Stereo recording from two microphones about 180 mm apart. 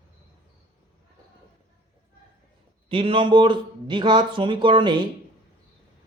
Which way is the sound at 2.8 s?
30° right (ahead or behind).